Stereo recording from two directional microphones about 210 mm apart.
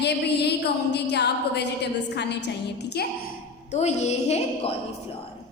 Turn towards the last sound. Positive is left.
turn(degrees=30)  # may be behind; listen again after turning